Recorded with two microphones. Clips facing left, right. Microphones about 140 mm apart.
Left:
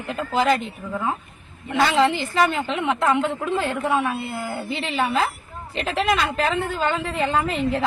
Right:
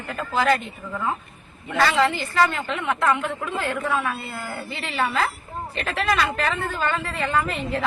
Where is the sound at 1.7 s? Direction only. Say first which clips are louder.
Left 2 dB; 20° left (ahead or behind).